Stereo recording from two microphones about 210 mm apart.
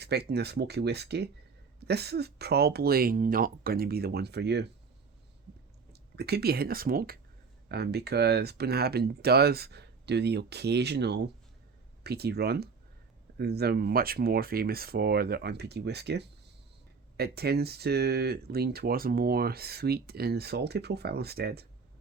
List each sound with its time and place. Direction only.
0.0 s speech: 50° right (ahead or behind)
5.9 s speech: 50° right (ahead or behind)